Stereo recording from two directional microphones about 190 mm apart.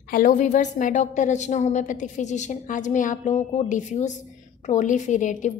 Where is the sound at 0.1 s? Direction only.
45° left (ahead or behind).